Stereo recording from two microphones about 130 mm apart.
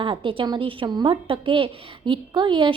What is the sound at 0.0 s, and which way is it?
A woman's voice, 40° right (ahead or behind).